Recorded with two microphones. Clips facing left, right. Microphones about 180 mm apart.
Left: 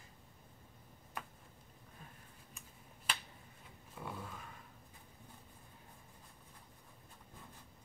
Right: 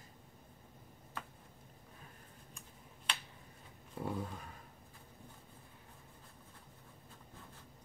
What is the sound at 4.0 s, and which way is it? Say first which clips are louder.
Speech: right 7 dB; 35° right (ahead or behind).